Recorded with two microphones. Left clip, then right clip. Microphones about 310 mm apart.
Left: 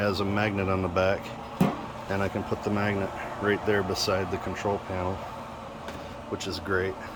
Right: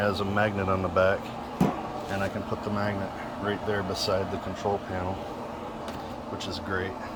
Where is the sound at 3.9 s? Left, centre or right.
Centre.